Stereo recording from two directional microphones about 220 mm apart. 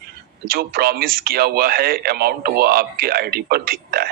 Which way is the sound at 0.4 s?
45° right (ahead or behind).